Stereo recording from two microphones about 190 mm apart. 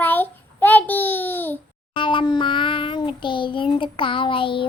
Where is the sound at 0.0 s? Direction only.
10° left (ahead or behind).